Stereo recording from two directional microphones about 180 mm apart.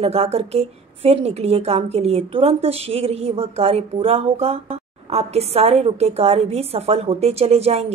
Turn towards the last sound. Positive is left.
turn(degrees=-35)  # may be behind; listen again after turning